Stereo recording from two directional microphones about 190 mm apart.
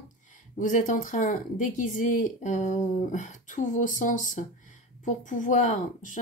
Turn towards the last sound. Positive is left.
turn(degrees=40)  # may be behind; listen again after turning